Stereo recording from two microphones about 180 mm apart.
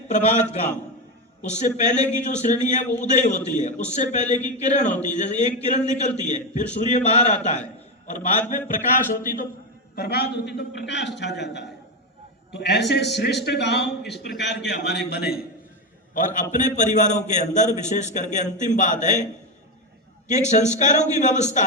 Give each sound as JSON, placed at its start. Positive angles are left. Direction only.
{"t": 0.1, "sound": "a man's voice", "side_deg": 40}
{"t": 1.4, "sound": "a man's voice", "side_deg": 40}
{"t": 9.9, "sound": "a man's voice", "side_deg": 60}
{"t": 10.6, "sound": "a man's voice", "side_deg": 75}
{"t": 16.1, "sound": "a man's voice", "side_deg": 45}
{"t": 20.5, "sound": "a man's voice", "side_deg": 40}